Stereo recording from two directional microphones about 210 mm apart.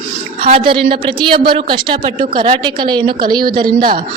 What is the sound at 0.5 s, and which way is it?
Speech, 25° right (ahead or behind).